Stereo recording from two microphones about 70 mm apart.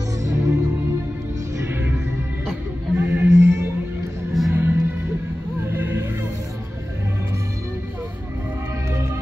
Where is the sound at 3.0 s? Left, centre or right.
Right.